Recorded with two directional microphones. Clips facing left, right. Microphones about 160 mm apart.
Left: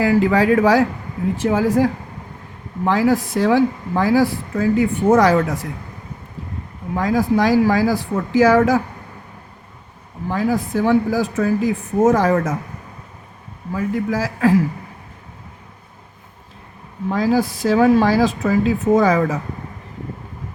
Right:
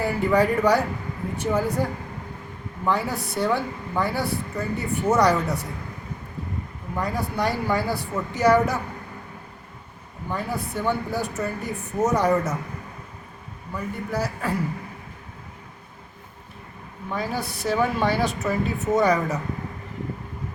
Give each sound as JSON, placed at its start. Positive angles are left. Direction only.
{"t": 0.0, "sound": "speech", "side_deg": 90}
{"t": 6.9, "sound": "speech", "side_deg": 90}
{"t": 10.2, "sound": "speech", "side_deg": 90}
{"t": 13.7, "sound": "speech", "side_deg": 90}
{"t": 17.1, "sound": "speech", "side_deg": 90}